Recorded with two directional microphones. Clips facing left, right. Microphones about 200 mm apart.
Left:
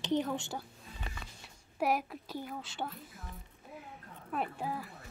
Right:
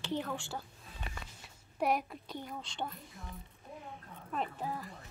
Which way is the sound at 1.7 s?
5° left (ahead or behind).